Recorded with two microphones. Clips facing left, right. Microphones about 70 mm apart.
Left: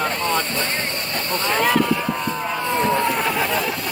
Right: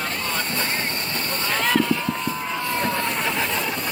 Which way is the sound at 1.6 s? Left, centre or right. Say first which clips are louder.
Left 2 dB; centre.